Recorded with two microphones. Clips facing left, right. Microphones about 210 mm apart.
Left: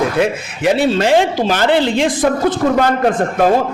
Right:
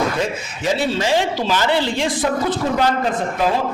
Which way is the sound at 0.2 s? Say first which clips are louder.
Left 7 dB; 65° left (ahead or behind).